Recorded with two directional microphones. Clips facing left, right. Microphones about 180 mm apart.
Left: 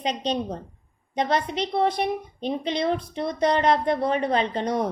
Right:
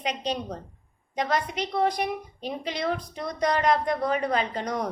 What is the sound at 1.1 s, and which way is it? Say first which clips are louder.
A woman's voice: left 3 dB; 30° left (ahead or behind).